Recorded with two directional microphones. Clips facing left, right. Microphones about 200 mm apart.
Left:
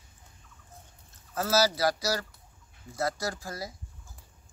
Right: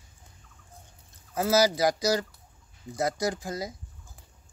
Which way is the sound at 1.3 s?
15° right (ahead or behind).